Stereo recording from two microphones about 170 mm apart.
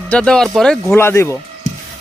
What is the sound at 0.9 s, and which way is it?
Speech, 15° left (ahead or behind).